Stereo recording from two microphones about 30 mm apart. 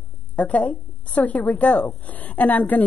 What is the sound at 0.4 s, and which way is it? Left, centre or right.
A woman's voice, left.